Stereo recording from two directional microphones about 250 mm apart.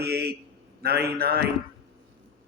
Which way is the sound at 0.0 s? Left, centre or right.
Right.